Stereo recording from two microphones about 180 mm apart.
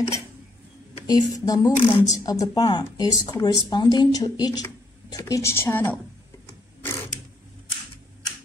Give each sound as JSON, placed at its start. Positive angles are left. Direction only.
{"t": 1.0, "sound": "speech", "side_deg": 20}